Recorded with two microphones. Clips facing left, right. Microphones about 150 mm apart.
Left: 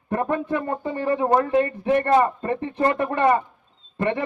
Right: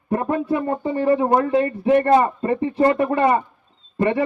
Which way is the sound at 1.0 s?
30° right (ahead or behind).